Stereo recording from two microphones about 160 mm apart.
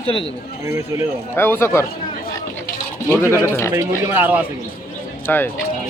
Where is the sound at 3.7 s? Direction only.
15° right (ahead or behind).